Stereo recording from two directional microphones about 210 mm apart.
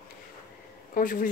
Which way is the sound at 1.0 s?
40° left (ahead or behind).